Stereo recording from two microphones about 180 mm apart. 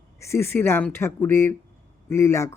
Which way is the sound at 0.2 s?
15° left (ahead or behind).